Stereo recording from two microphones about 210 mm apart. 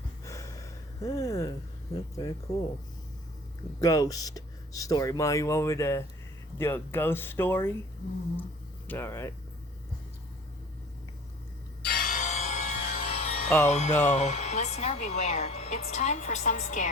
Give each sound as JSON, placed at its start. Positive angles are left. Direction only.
{"t": 0.3, "sound": "a sound", "side_deg": 15}
{"t": 3.8, "sound": "speech", "side_deg": 15}
{"t": 8.9, "sound": "speech", "side_deg": 10}
{"t": 11.8, "sound": "music", "side_deg": 45}
{"t": 13.7, "sound": "speech", "side_deg": 35}